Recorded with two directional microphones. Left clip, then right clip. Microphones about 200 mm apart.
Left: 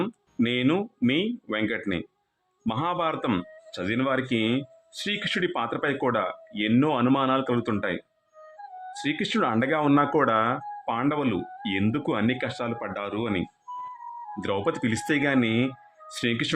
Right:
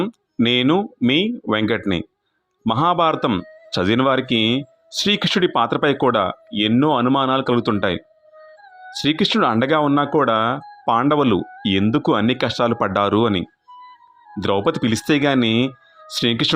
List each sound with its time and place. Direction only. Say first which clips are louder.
0.4 s speech: right 8 dB; 30° right (ahead or behind)
14.3 s speech: right 8 dB; 25° right (ahead or behind)